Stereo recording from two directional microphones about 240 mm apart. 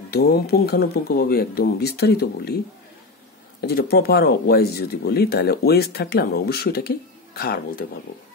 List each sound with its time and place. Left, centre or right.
0.1 s speech: left
3.6 s speech: left